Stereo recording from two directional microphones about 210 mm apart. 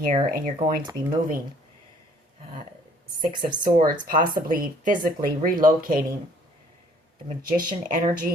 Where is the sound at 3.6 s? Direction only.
40° right (ahead or behind).